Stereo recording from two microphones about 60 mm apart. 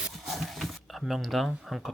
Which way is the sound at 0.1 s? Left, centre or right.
Centre.